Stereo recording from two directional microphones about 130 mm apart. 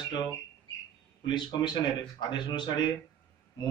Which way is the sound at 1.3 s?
35° left (ahead or behind).